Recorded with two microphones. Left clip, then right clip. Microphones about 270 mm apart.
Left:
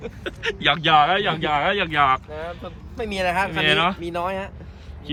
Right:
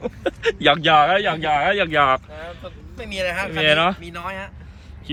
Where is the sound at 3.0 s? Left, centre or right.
Left.